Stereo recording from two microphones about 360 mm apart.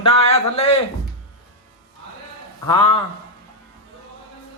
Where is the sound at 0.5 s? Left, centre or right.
Centre.